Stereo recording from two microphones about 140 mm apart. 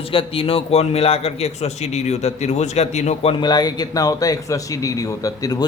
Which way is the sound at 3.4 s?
30° left (ahead or behind).